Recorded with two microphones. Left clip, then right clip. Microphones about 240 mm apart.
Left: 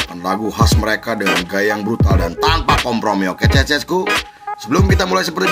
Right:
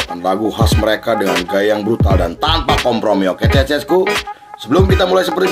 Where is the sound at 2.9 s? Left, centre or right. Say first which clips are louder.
Right 3 dB; left.